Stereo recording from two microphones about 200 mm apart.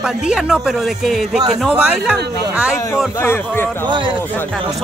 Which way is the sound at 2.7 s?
15° left (ahead or behind).